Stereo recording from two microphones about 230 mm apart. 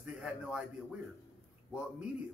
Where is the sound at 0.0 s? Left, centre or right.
Centre.